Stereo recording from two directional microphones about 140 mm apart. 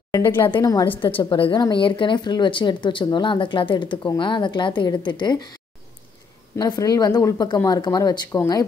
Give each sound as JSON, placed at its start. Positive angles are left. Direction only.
{"t": 0.1, "sound": "speech", "side_deg": 20}
{"t": 0.8, "sound": "a woman's voice", "side_deg": 35}
{"t": 6.5, "sound": "speech", "side_deg": 25}